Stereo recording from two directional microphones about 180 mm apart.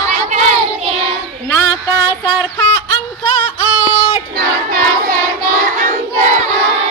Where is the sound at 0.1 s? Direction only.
40° right (ahead or behind).